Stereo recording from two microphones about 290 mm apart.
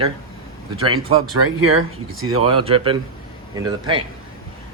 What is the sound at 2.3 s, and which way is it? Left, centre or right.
Speech, centre.